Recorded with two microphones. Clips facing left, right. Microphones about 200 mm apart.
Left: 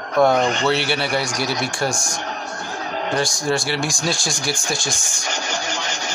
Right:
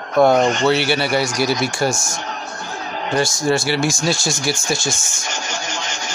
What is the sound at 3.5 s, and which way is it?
Speech, 5° right (ahead or behind).